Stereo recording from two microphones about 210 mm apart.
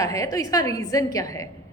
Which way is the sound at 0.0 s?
15° left (ahead or behind).